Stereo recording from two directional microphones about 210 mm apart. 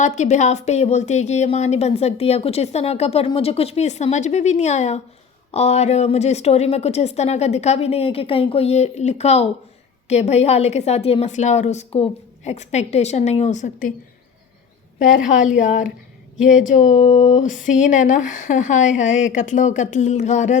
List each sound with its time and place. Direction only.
0.0 s speech: 35° left (ahead or behind)
14.9 s speech: 40° left (ahead or behind)